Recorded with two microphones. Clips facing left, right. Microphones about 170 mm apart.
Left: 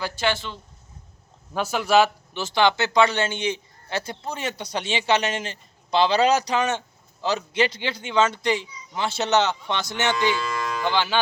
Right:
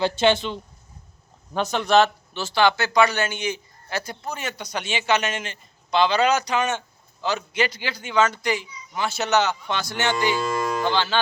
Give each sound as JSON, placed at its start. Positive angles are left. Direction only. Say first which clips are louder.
{"t": 0.0, "sound": "speech", "louder": "right 6 dB", "side_deg": -20}
{"t": 1.5, "sound": "speech", "louder": "right 1 dB", "side_deg": 5}
{"t": 10.3, "sound": "speech", "louder": "right 3 dB", "side_deg": -45}
{"t": 10.9, "sound": "cattle", "louder": "even", "side_deg": 15}